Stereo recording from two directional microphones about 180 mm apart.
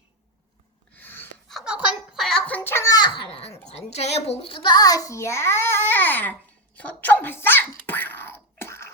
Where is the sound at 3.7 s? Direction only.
35° left (ahead or behind); by 6.3 s 10° left (ahead or behind).